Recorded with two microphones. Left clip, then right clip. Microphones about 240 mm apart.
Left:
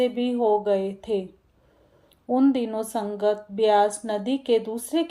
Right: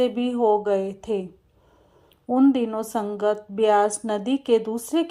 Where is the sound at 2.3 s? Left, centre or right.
Centre.